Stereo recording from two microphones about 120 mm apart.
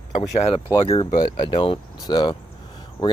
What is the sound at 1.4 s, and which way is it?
Speech, 45° left (ahead or behind).